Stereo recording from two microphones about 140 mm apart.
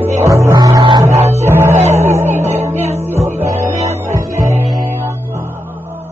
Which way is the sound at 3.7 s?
50° right (ahead or behind).